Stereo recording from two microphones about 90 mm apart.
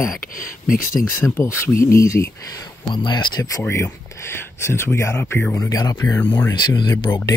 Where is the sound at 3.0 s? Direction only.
50° left (ahead or behind).